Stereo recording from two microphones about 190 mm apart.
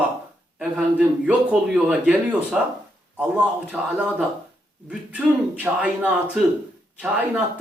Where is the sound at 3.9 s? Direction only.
5° right (ahead or behind).